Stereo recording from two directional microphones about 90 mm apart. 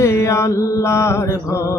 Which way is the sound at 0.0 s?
30° left (ahead or behind).